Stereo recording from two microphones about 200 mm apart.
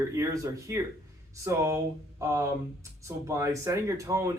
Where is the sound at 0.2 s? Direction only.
15° right (ahead or behind).